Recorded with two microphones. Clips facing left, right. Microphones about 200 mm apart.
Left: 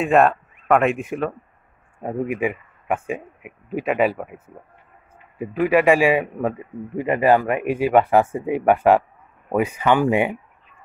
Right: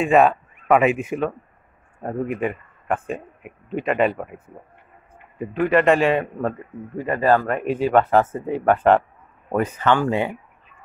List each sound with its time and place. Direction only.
0.0 s a man's voice: centre (ahead or behind)
5.4 s a man's voice: 10° left (ahead or behind)